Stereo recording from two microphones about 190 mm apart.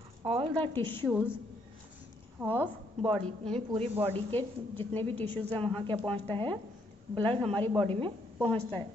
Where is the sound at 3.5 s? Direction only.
30° right (ahead or behind).